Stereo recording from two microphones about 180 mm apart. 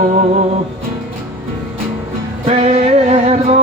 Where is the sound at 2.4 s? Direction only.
35° right (ahead or behind).